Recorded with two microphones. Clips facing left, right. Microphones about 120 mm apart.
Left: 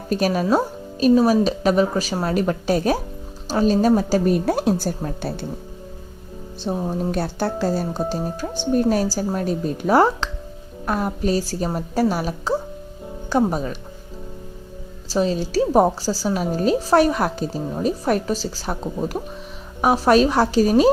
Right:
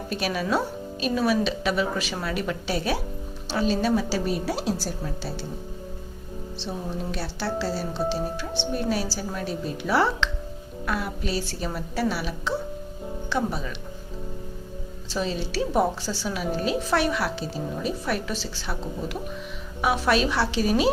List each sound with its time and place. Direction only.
0.1 s a woman's voice: 40° left (ahead or behind)
6.6 s a woman's voice: 45° left (ahead or behind)
15.1 s a woman's voice: 40° left (ahead or behind)